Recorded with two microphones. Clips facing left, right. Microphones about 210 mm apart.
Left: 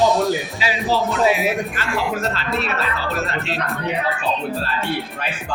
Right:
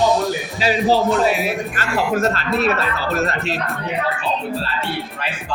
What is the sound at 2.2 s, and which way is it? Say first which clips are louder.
Speech: right 5 dB; 45° right (ahead or behind).